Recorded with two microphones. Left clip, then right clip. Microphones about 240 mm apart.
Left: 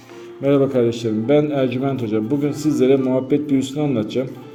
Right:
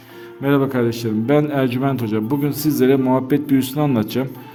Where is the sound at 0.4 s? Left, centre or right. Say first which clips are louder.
Left 2 dB; right.